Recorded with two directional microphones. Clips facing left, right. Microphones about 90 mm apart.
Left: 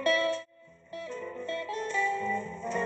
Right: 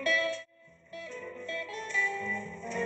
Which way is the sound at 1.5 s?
40° left (ahead or behind).